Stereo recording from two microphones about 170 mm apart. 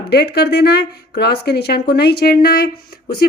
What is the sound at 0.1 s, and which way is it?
A woman's voice, 75° left (ahead or behind).